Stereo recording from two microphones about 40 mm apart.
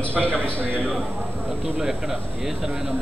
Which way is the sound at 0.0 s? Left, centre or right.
Left.